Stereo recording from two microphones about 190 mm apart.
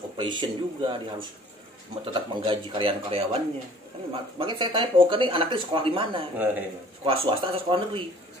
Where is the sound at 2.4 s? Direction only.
30° right (ahead or behind).